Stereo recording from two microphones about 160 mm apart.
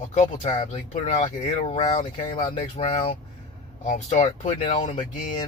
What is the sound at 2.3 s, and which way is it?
Speech, 30° left (ahead or behind).